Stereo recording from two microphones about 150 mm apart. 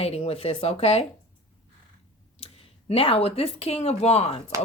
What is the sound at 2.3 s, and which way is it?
Speech, 40° left (ahead or behind).